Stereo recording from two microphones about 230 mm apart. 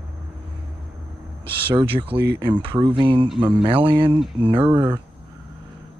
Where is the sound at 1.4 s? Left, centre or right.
Right.